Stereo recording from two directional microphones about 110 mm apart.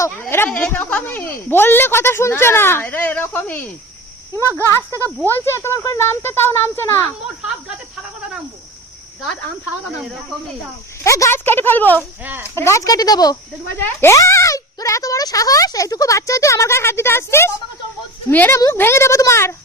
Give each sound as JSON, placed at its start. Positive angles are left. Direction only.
{"t": 0.0, "sound": "speech", "side_deg": 20}
{"t": 4.6, "sound": "speech", "side_deg": 25}
{"t": 11.0, "sound": "speech", "side_deg": 25}
{"t": 12.2, "sound": "speech", "side_deg": -15}
{"t": 12.5, "sound": "speech", "side_deg": 25}
{"t": 13.7, "sound": "speech", "side_deg": 20}